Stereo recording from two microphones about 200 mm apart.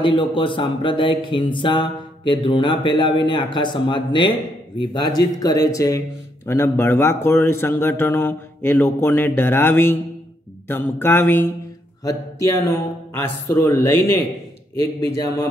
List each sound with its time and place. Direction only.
0.0 s speech: 25° left (ahead or behind)